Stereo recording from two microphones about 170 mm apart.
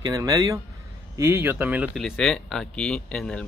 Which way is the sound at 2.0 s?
5° left (ahead or behind).